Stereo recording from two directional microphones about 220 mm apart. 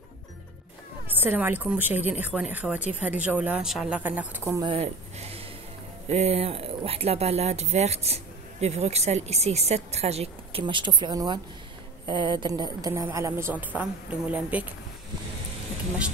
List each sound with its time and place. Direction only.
1.0 s a woman's voice: 10° right (ahead or behind)